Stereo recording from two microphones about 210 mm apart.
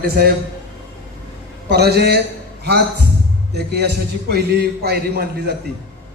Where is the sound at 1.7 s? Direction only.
50° right (ahead or behind).